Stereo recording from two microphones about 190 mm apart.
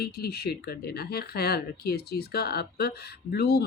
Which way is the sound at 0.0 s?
55° left (ahead or behind).